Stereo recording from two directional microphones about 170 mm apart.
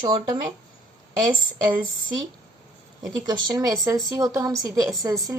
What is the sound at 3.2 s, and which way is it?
A woman's voice, 25° right (ahead or behind).